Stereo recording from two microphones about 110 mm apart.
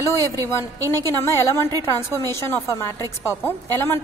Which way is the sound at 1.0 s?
25° left (ahead or behind).